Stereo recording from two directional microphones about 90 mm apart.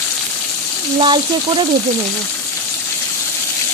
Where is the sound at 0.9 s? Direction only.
65° right (ahead or behind).